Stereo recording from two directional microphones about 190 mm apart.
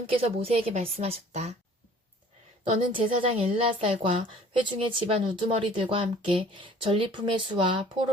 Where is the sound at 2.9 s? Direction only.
30° right (ahead or behind).